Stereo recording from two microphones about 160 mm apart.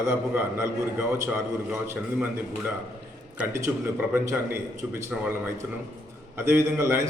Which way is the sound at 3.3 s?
15° right (ahead or behind).